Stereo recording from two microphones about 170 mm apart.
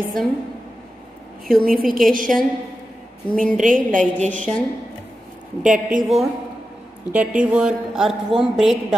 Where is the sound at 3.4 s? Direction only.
50° right (ahead or behind).